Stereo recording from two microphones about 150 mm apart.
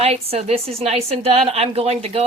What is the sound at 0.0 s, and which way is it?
A woman's voice, 45° right (ahead or behind).